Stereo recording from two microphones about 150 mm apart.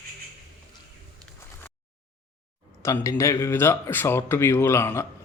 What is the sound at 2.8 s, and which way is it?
Speech, 20° left (ahead or behind).